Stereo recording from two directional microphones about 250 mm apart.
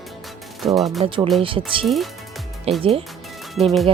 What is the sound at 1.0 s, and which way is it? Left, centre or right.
A woman's voice, right.